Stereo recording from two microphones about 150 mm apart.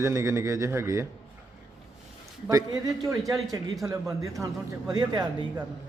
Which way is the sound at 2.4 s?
25° right (ahead or behind).